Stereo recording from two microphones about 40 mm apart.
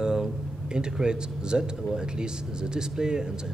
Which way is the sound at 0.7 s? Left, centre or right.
Centre.